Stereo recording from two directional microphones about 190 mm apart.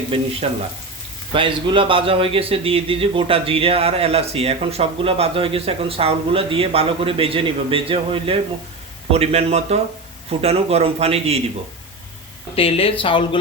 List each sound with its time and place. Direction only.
0.4 s a man's voice: 35° right (ahead or behind)
12.5 s speech: 30° left (ahead or behind)